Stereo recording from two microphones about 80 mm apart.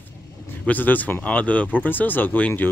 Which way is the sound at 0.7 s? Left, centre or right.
Left.